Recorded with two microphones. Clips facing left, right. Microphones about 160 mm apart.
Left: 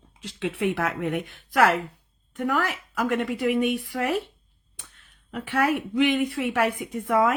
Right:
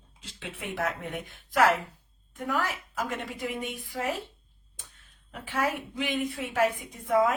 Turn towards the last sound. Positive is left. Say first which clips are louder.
# left 2 dB
turn(degrees=70)  # may be behind; listen again after turning